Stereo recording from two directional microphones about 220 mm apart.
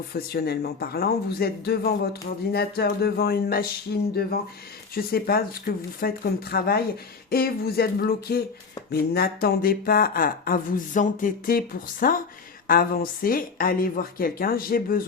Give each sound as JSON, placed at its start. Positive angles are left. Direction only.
{"t": 0.1, "sound": "speech", "side_deg": 45}